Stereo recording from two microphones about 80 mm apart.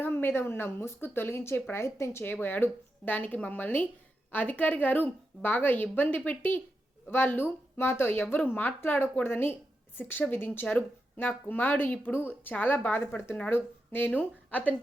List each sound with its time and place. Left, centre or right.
0.0 s a woman's voice: left